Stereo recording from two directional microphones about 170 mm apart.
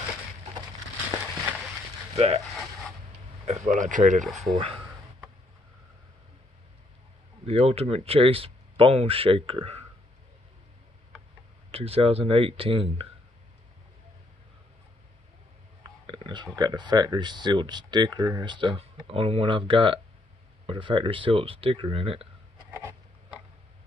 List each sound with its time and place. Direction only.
1.2 s a sound: 5° right (ahead or behind)
2.1 s a sound: 35° right (ahead or behind)
3.4 s speech: 45° right (ahead or behind)
4.2 s speech: centre (ahead or behind)
7.4 s speech: 35° right (ahead or behind)
11.7 s speech: 35° right (ahead or behind)
15.8 s whispering: 25° right (ahead or behind)
16.5 s speech: 25° right (ahead or behind)
22.7 s a sound: 15° right (ahead or behind)